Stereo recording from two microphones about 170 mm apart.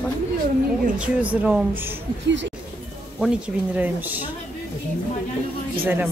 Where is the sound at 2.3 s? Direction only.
90° right.